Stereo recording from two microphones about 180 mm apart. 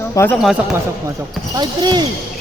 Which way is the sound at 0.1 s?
15° left (ahead or behind).